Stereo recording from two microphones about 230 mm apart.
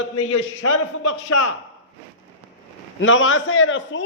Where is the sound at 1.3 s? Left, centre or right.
Left.